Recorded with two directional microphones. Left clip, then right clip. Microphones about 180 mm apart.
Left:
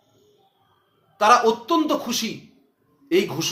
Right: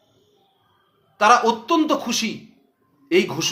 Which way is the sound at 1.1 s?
15° right (ahead or behind).